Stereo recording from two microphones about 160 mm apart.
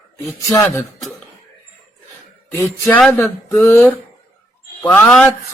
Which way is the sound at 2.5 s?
15° left (ahead or behind).